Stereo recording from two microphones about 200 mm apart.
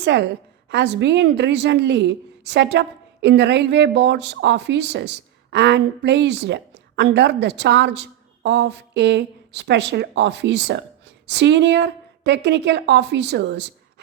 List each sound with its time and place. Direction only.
0.0 s a woman's voice: 60° right (ahead or behind)